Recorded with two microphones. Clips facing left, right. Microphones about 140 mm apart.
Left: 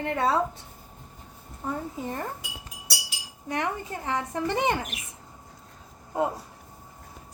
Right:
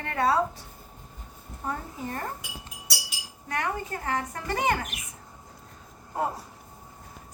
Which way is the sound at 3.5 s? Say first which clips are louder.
Left 1 dB; 20° left (ahead or behind).